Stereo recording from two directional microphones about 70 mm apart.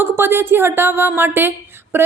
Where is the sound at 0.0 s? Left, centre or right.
Right.